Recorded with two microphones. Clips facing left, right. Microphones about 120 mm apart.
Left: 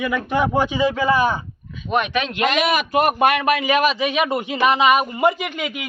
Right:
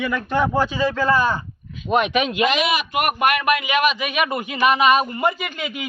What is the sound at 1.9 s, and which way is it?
Speech, 15° right (ahead or behind).